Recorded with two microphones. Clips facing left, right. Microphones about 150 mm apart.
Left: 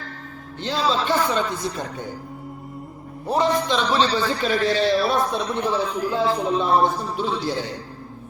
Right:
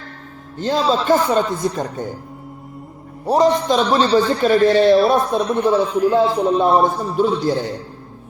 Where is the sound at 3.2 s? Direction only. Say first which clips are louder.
Right 6 dB; 40° right (ahead or behind).